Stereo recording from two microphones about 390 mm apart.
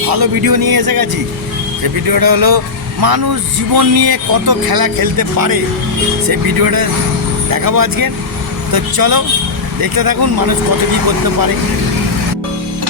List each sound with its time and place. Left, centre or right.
0.1 s a man's voice: right
2.0 s a man's voice: right